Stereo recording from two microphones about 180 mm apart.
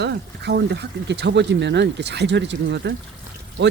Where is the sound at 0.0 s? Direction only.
70° right (ahead or behind).